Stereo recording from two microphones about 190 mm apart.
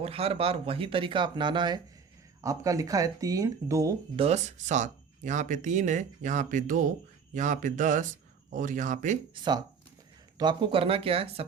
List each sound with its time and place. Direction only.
0.0 s speech: 30° right (ahead or behind)
4.2 s speech: 35° right (ahead or behind)
9.3 s speech: 25° right (ahead or behind)